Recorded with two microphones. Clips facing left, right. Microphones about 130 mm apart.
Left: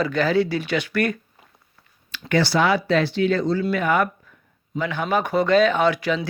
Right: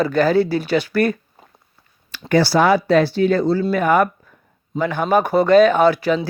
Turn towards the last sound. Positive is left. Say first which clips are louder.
# right 5 dB
turn(degrees=-35)  # may be behind; listen again after turning